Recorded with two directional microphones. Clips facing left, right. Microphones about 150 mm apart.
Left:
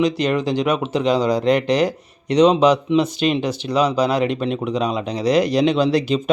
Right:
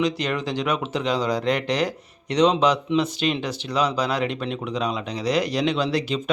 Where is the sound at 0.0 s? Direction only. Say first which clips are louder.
Left 6 dB; 15° left (ahead or behind).